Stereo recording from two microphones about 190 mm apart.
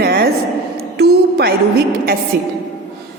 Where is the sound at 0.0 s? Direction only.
55° right (ahead or behind).